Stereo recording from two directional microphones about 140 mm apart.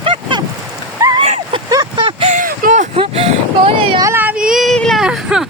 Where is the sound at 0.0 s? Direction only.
35° right (ahead or behind).